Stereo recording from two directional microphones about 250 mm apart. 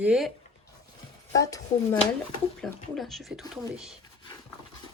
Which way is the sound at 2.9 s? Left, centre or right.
Centre.